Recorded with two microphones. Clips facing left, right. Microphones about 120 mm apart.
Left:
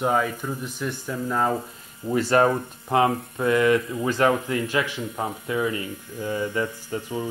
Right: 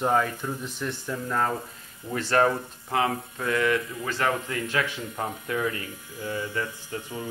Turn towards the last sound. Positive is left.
turn(degrees=15)  # may be behind; listen again after turning